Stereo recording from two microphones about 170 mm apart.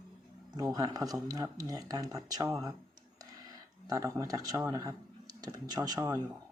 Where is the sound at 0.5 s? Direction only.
20° right (ahead or behind).